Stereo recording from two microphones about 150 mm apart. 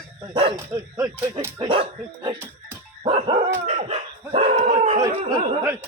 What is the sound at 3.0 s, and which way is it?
Dog, 30° right (ahead or behind).